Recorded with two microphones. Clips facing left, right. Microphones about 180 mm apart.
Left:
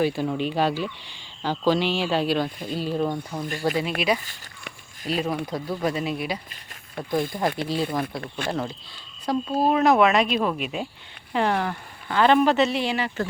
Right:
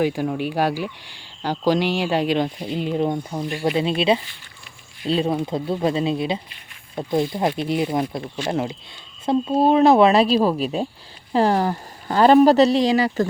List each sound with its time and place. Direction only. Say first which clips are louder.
0.0 s speech: right 2 dB; 15° right (ahead or behind); by 13.2 s 35° right (ahead or behind)